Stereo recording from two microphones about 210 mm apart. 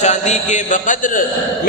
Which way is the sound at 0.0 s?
35° left (ahead or behind).